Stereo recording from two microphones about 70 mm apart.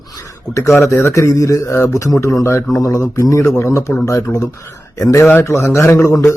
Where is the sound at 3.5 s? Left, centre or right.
Left.